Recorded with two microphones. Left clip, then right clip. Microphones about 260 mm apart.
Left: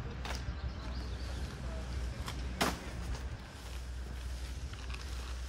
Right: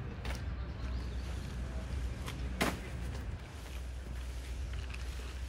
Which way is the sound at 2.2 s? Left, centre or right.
Centre.